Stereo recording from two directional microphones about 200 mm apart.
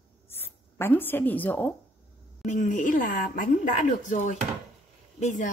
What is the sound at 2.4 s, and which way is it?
A woman's voice, 40° left (ahead or behind).